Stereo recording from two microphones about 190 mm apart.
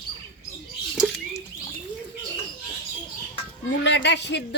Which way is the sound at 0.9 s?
Centre (ahead or behind).